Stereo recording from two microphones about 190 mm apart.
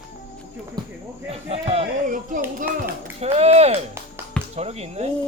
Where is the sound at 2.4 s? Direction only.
10° right (ahead or behind).